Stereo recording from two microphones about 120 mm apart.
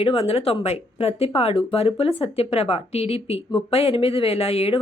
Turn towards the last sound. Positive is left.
turn(degrees=55)  # may be behind; listen again after turning